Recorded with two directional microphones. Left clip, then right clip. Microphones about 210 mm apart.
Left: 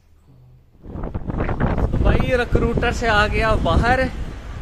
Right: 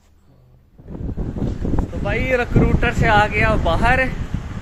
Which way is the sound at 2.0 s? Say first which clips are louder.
Right 1 dB; 20° left (ahead or behind).